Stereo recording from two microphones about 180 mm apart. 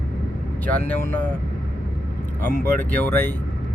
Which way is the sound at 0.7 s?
10° left (ahead or behind).